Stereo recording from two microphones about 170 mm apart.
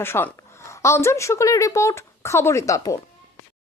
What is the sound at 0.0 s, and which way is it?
Speech, 15° left (ahead or behind).